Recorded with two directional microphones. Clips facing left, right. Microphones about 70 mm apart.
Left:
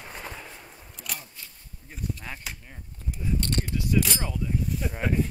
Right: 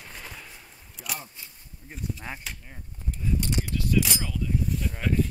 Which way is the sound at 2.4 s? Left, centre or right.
Centre.